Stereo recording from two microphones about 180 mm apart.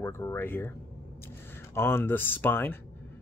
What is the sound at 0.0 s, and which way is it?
Speech, 15° left (ahead or behind).